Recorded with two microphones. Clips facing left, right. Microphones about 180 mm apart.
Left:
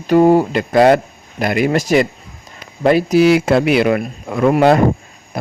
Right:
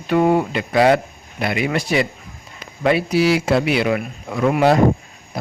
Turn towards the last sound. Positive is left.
turn(degrees=55)  # may be behind; listen again after turning